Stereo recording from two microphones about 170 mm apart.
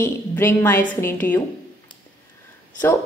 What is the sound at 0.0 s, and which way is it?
A woman's voice, 15° left (ahead or behind).